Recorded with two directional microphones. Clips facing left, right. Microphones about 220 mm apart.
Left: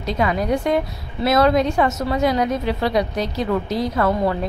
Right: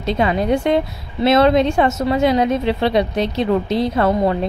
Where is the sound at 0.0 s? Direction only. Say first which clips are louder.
Right 3 dB; 25° right (ahead or behind).